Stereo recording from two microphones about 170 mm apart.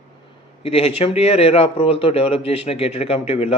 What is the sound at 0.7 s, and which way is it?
A man's voice, 35° left (ahead or behind).